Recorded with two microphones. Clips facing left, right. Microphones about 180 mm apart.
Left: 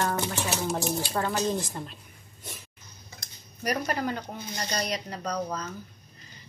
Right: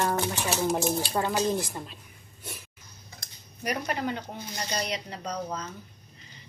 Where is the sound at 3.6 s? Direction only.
40° left (ahead or behind).